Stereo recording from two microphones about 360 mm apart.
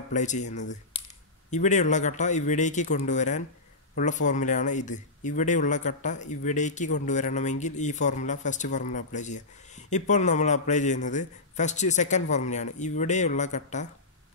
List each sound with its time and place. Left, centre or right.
0.1 s speech: centre